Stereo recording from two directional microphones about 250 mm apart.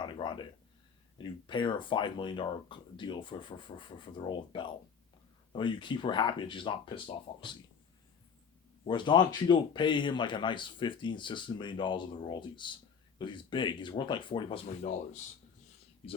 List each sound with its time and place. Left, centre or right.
0.0 s a sound: centre
1.2 s speech: centre
8.8 s speech: centre